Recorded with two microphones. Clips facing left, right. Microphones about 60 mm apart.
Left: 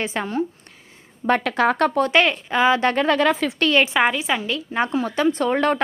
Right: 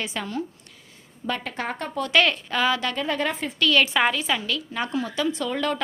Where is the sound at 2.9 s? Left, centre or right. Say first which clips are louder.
Left 8 dB; left.